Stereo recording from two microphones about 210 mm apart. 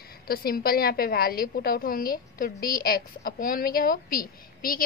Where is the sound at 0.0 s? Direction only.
45° left (ahead or behind).